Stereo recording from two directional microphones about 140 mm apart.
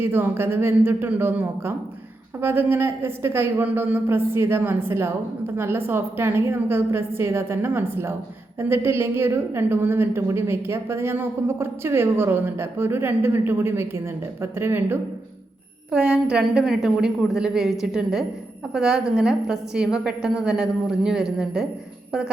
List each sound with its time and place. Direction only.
0.0 s a woman's voice: 15° right (ahead or behind)
15.9 s a woman's voice: 5° right (ahead or behind)